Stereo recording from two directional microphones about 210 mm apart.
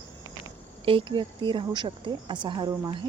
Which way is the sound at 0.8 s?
25° right (ahead or behind).